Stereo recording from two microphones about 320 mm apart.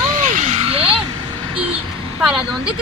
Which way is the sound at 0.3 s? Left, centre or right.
Right.